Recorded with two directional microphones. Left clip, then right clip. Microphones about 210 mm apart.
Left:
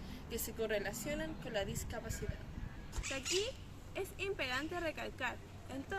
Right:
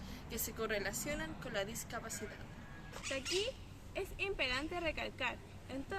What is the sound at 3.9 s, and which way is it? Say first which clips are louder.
Speech: right 1 dB; 5° right (ahead or behind).